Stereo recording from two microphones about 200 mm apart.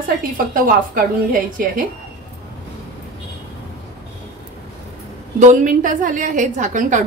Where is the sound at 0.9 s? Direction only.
45° right (ahead or behind).